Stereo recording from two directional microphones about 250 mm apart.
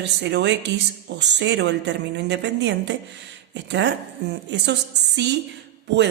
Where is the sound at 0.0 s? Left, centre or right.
Right.